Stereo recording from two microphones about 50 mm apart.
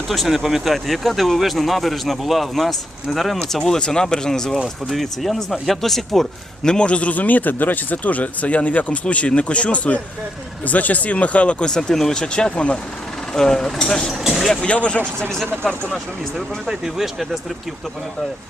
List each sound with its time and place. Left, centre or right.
0.1 s speech: centre
3.7 s speech: centre
6.7 s a man's voice: left
14.1 s speech: centre
14.6 s a man's voice: left
15.3 s speech: centre
16.6 s speech: centre